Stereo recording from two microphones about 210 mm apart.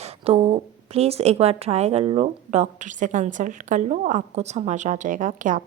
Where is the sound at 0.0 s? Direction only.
30° right (ahead or behind).